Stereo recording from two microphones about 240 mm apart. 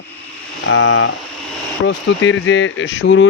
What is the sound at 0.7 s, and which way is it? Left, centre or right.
Speech, left.